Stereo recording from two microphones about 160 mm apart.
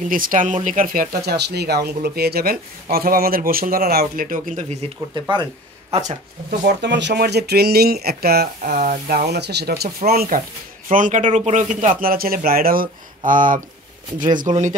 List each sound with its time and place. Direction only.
0.1 s speech: 60° right (ahead or behind)
5.3 s speech: 25° right (ahead or behind)
6.6 s speech: 90° right; by 10.4 s 65° right (ahead or behind)
10.9 s speech: 55° right (ahead or behind)
14.5 s speech: 45° right (ahead or behind)